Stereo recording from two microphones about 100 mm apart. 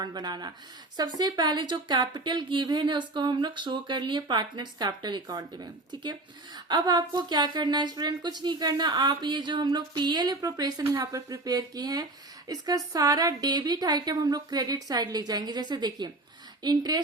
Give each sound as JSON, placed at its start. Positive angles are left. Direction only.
{"t": 0.0, "sound": "a woman's voice", "side_deg": -45}